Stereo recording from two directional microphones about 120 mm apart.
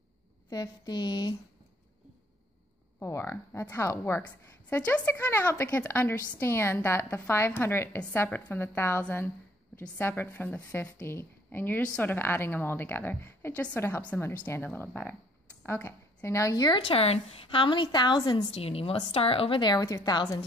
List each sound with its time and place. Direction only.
0.5 s speech: 35° left (ahead or behind)
3.0 s a woman's voice: 25° left (ahead or behind)
16.6 s a woman's voice: 45° left (ahead or behind)
18.5 s a woman's voice: 55° left (ahead or behind); by 20.2 s 35° left (ahead or behind)